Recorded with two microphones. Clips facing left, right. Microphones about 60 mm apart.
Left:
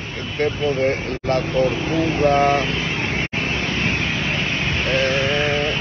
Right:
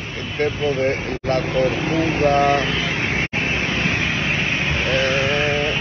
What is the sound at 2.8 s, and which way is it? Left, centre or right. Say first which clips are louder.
Vehicle: right 1 dB; right.